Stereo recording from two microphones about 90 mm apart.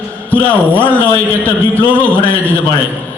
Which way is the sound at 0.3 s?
20° left (ahead or behind).